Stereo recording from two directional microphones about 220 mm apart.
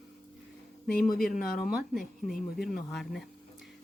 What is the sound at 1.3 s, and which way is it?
Speech, 40° left (ahead or behind).